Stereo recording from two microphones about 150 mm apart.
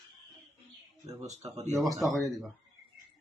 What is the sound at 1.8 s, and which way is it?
Speech, centre (ahead or behind).